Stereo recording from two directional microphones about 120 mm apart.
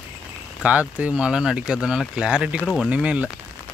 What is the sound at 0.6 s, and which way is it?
Speech, 10° right (ahead or behind).